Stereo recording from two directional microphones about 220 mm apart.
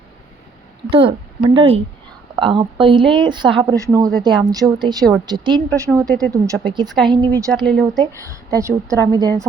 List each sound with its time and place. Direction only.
0.9 s a woman's voice: 20° right (ahead or behind)
7.5 s speech: centre (ahead or behind)
7.9 s a woman's voice: 15° right (ahead or behind)